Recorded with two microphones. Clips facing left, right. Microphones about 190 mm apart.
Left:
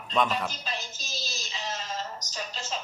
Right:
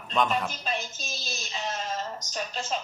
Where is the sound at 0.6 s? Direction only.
55° right (ahead or behind).